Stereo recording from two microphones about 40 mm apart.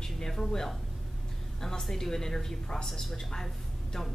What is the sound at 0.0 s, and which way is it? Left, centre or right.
A woman's voice, centre.